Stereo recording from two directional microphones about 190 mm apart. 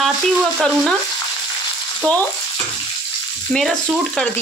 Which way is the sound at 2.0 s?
5° left (ahead or behind).